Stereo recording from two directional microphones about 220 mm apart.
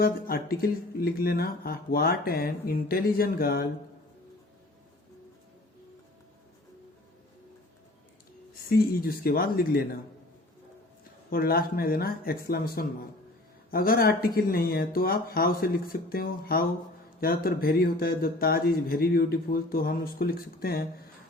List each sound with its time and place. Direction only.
0.0 s speech: 40° left (ahead or behind)
8.7 s speech: 45° left (ahead or behind)
11.3 s speech: 45° left (ahead or behind)